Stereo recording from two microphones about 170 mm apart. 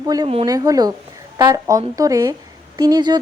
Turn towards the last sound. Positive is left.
turn(degrees=-25)  # may be behind; listen again after turning